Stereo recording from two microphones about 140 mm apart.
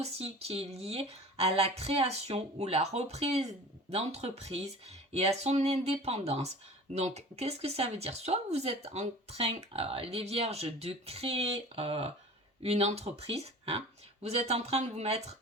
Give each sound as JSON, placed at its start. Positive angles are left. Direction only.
{"t": 0.0, "sound": "speech", "side_deg": -50}